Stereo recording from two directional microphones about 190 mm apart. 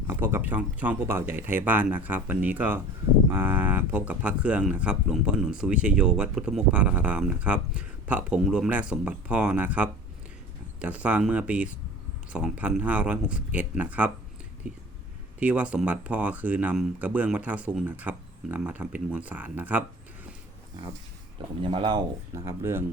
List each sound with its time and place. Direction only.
0.1 s speech: 10° right (ahead or behind)
15.4 s speech: 5° right (ahead or behind)
21.6 s speech: 25° right (ahead or behind)